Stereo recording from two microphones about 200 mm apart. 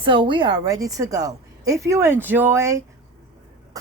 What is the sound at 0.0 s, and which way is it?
A woman's voice, 25° right (ahead or behind).